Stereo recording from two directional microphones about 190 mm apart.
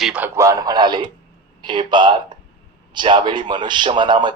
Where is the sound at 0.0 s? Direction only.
5° right (ahead or behind).